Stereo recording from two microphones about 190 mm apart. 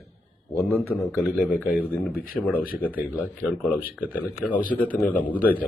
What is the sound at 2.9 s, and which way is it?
Speech, 10° right (ahead or behind).